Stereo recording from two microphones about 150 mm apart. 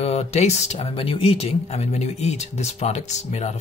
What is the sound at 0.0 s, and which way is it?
Speech, 45° left (ahead or behind).